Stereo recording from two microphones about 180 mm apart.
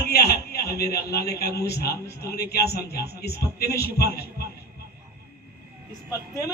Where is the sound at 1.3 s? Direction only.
65° left (ahead or behind).